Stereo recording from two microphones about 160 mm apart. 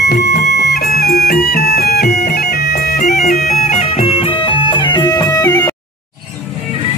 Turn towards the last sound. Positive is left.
turn(degrees=25)  # may be behind; listen again after turning